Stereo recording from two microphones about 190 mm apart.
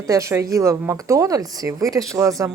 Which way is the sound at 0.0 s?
15° right (ahead or behind).